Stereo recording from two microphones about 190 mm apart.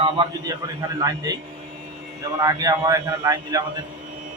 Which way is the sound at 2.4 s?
20° right (ahead or behind).